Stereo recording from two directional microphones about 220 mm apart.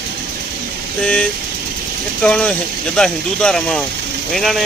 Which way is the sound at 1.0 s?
5° left (ahead or behind).